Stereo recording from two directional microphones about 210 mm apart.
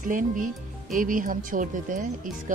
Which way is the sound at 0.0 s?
40° right (ahead or behind).